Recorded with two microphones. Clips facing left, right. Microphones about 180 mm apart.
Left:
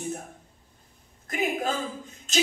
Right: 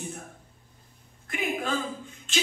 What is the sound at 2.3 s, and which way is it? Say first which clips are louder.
Music: left 6 dB; 40° left (ahead or behind).